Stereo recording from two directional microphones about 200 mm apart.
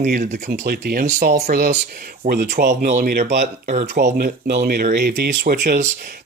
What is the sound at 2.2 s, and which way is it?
Speech, 40° right (ahead or behind).